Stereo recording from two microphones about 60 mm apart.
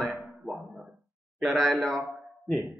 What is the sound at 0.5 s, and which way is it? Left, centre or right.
Dog, right.